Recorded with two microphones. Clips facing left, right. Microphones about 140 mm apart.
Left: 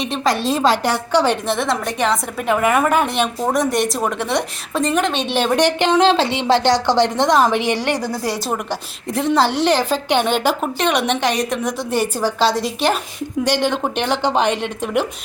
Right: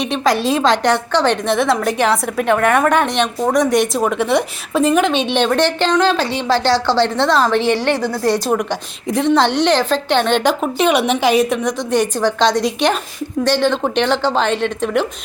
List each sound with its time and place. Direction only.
0.0 s a woman's voice: centre (ahead or behind)